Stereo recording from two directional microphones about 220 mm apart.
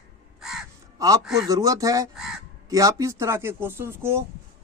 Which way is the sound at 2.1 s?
Centre (ahead or behind).